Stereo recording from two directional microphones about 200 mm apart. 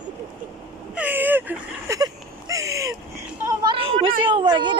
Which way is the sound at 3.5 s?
25° right (ahead or behind).